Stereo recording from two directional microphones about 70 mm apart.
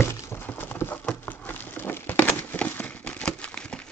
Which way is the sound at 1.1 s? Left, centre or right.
Left.